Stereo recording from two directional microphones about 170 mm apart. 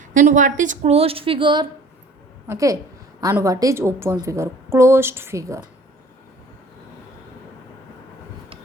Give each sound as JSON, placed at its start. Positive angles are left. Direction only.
{"t": 0.0, "sound": "a woman's voice", "side_deg": -50}